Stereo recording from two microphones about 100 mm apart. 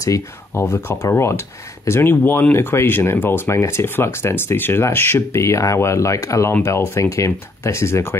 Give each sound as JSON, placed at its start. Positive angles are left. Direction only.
{"t": 0.0, "sound": "speech", "side_deg": 30}